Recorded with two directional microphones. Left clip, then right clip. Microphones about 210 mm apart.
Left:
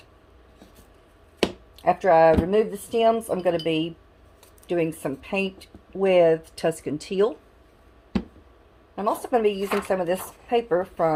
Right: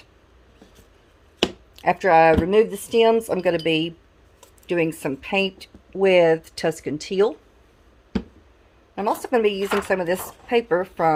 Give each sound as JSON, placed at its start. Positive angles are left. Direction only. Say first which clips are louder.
{"t": 1.7, "sound": "speech", "louder": "right 2 dB", "side_deg": -30}
{"t": 9.0, "sound": "speech", "louder": "right 2 dB", "side_deg": -30}